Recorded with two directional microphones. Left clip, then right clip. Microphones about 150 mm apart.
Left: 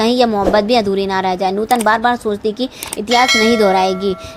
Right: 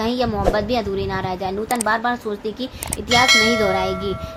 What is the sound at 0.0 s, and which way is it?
A woman's voice, 45° left (ahead or behind).